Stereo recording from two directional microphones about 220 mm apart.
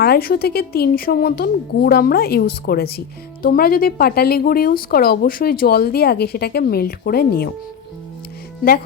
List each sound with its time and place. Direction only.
0.0 s speech: 45° left (ahead or behind)